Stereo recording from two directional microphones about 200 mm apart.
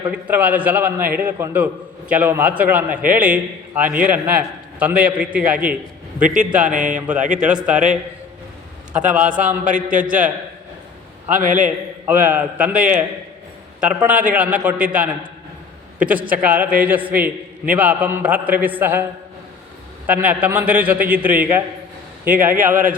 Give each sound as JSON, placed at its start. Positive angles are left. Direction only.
{"t": 0.1, "sound": "a man's voice", "side_deg": -10}
{"t": 6.7, "sound": "a man's voice", "side_deg": -40}
{"t": 7.4, "sound": "a man's voice", "side_deg": -5}
{"t": 9.1, "sound": "a man's voice", "side_deg": -5}
{"t": 11.3, "sound": "a man's voice", "side_deg": -40}
{"t": 12.0, "sound": "a man's voice", "side_deg": -10}
{"t": 20.1, "sound": "a man's voice", "side_deg": -10}